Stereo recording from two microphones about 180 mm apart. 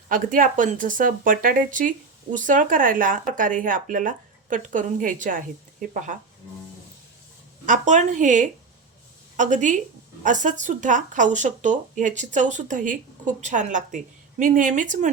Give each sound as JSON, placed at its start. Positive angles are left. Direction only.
{"t": 0.1, "sound": "speech", "side_deg": -50}
{"t": 7.6, "sound": "speech", "side_deg": -45}